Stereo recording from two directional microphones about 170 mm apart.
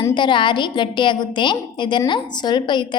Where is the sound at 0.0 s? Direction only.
25° left (ahead or behind).